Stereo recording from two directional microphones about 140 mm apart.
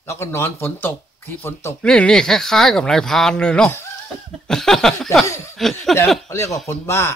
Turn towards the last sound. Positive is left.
turn(degrees=20)  # may be behind; listen again after turning